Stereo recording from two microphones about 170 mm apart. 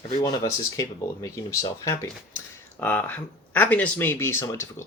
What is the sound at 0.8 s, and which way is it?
Speech, 20° left (ahead or behind).